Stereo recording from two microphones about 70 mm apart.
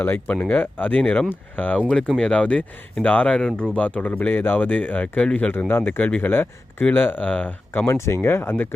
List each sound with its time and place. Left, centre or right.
0.0 s speech: left
1.9 s speech: centre
5.5 s speech: left
6.0 s speech: left
7.7 s speech: left